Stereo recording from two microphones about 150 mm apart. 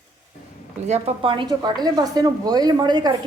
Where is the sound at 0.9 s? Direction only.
45° right (ahead or behind).